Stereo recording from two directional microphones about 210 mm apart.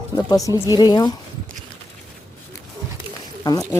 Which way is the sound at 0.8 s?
20° left (ahead or behind).